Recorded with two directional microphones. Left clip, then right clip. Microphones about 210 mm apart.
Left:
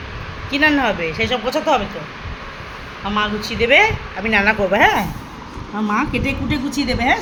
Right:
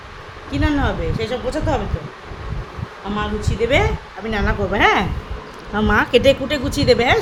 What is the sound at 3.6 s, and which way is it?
Speech, 5° right (ahead or behind).